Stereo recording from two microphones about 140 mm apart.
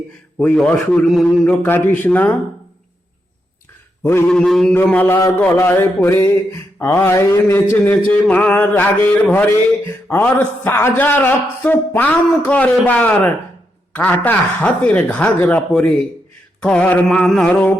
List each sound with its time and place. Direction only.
0.3 s a man's voice: 5° left (ahead or behind)
1.6 s a man's voice: 15° left (ahead or behind)
4.0 s a man's voice: 15° left (ahead or behind)
4.3 s a man's voice: centre (ahead or behind)
4.7 s a man's voice: 15° left (ahead or behind)